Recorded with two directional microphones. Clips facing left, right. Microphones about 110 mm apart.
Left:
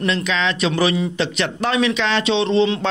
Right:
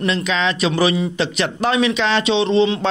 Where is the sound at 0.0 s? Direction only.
20° right (ahead or behind).